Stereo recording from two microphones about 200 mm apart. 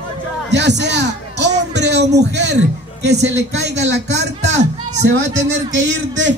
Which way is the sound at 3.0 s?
55° right (ahead or behind).